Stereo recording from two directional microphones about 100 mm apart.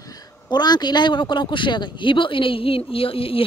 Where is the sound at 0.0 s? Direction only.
40° left (ahead or behind).